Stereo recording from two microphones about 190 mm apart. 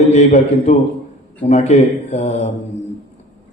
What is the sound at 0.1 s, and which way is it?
A man's voice, 35° left (ahead or behind).